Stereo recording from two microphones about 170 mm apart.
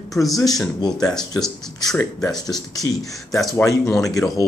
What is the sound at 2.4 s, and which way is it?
Speech, 25° left (ahead or behind).